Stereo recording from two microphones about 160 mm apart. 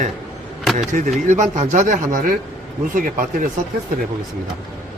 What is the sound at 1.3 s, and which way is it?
A man's voice, 50° right (ahead or behind).